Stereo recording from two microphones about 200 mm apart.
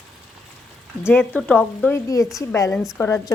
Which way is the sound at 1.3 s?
5° left (ahead or behind).